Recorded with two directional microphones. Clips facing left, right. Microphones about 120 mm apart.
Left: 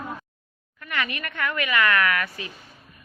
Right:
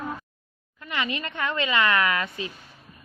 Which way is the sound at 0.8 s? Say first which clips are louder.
Even; 20° right (ahead or behind).